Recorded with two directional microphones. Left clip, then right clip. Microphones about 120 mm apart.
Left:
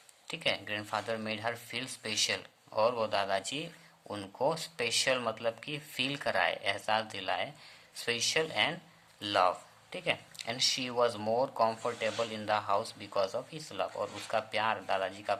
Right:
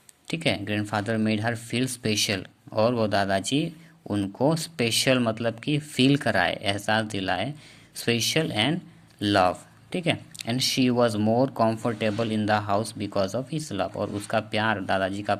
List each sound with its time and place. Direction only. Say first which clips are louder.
0.3 s speech: right 6 dB; 35° right (ahead or behind)